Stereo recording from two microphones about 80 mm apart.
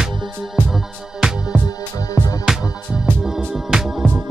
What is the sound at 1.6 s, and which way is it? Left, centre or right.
Music, left.